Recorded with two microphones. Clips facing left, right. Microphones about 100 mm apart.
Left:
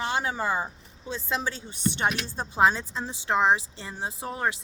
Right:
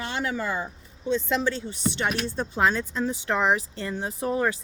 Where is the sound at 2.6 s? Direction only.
25° left (ahead or behind).